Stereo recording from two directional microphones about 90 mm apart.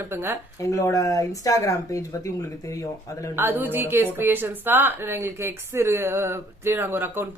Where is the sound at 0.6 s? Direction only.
40° left (ahead or behind).